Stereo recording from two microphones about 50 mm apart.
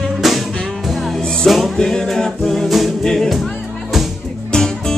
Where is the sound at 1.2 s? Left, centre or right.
Centre.